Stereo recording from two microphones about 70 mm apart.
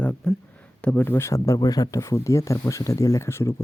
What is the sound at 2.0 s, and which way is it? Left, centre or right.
Speech, left.